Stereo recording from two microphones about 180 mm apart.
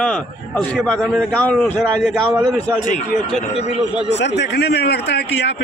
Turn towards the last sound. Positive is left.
turn(degrees=70)  # may be behind; listen again after turning